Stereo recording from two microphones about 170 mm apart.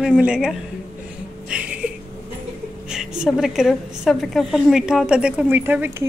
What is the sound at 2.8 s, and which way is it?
A woman's voice, 5° right (ahead or behind).